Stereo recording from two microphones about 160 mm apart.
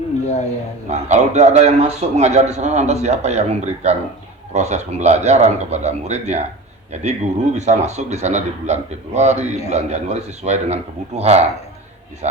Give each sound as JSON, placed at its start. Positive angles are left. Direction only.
{"t": 0.9, "sound": "a man's voice", "side_deg": -45}